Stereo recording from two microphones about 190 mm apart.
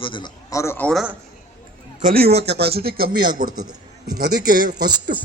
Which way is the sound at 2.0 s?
50° right (ahead or behind).